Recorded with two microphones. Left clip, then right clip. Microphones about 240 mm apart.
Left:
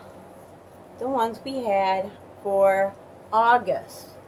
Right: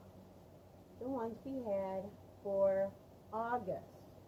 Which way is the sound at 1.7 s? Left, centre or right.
Centre.